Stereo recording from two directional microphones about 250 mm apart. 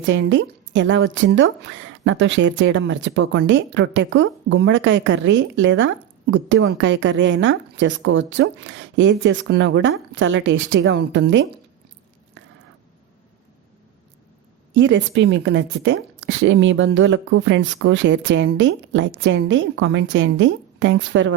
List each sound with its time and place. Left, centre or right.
0.0 s a woman's voice: right
14.7 s a woman's voice: right